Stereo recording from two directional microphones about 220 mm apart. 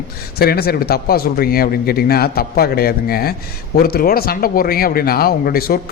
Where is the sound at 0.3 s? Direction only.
45° left (ahead or behind).